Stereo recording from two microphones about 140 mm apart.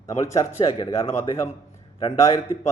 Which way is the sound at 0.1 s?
45° left (ahead or behind).